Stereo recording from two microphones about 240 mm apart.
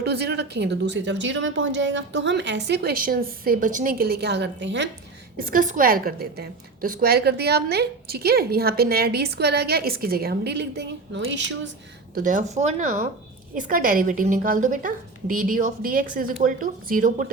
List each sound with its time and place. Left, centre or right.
0.0 s speech: right
5.5 s a woman's voice: right
12.1 s a woman's voice: right